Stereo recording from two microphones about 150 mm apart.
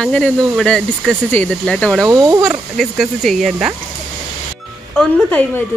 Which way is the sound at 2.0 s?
25° right (ahead or behind).